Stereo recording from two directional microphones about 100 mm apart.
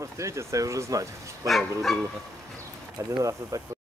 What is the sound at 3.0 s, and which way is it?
Speech, 35° right (ahead or behind).